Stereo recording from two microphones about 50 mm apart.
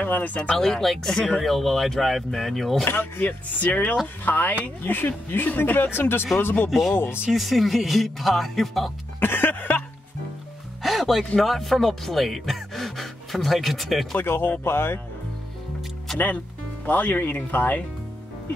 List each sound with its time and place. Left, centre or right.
0.0 s speech: left
0.6 s speech: centre
2.8 s speech: left
3.3 s speech: left
5.9 s speech: left
7.2 s speech: centre
9.2 s music: left
10.8 s music: centre
11.3 s speech: centre
14.1 s speech: left
16.8 s speech: left